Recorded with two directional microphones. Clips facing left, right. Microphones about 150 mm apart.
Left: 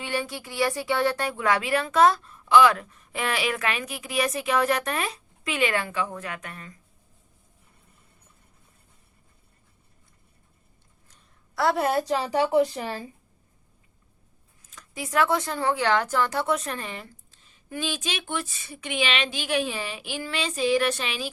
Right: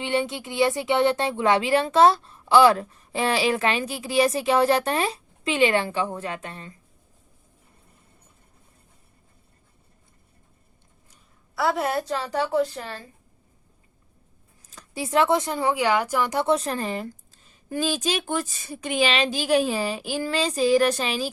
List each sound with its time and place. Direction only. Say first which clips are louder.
0.0 s speech: right 5 dB; 25° right (ahead or behind)
11.5 s a woman's voice: left 1 dB; centre (ahead or behind)
12.0 s speech: left 2 dB; 15° left (ahead or behind)
14.7 s speech: right 5 dB; 30° right (ahead or behind)